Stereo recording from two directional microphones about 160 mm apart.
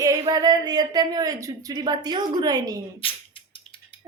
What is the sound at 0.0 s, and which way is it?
Speech, 20° right (ahead or behind).